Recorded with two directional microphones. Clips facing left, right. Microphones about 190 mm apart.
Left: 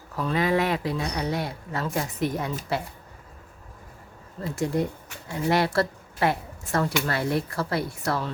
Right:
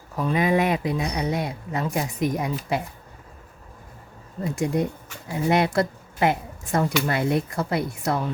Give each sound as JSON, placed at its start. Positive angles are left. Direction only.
{"t": 0.2, "sound": "speech", "side_deg": -15}
{"t": 4.4, "sound": "speech", "side_deg": -15}